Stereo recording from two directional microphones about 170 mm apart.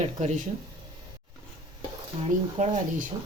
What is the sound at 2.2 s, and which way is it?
Speech, 40° right (ahead or behind).